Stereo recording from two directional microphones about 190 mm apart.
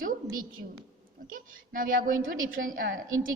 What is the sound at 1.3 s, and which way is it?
A woman's voice, 45° right (ahead or behind).